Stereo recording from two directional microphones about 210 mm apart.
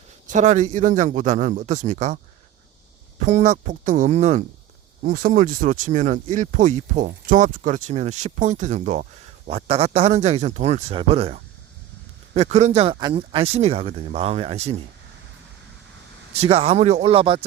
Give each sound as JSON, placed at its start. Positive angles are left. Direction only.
{"t": 0.3, "sound": "speech", "side_deg": -35}
{"t": 3.2, "sound": "speech", "side_deg": -35}
{"t": 16.3, "sound": "speech", "side_deg": -30}